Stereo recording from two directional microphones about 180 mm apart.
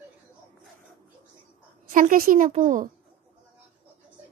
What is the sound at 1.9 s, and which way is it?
A woman's voice, 50° right (ahead or behind).